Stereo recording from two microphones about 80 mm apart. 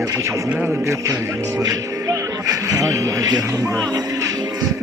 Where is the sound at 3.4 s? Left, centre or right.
Right.